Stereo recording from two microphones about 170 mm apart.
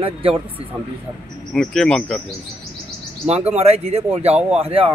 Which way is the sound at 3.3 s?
35° right (ahead or behind).